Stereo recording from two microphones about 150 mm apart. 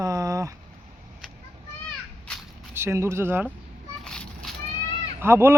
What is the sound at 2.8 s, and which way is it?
Speech, 15° right (ahead or behind).